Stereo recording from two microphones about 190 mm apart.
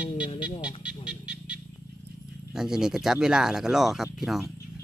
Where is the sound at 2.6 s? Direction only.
5° right (ahead or behind).